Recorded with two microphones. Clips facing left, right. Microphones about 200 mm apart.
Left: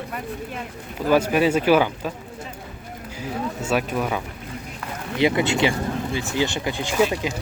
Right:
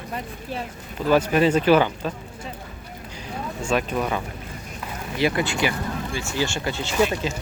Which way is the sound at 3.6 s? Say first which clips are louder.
Right 1 dB; 10° left (ahead or behind).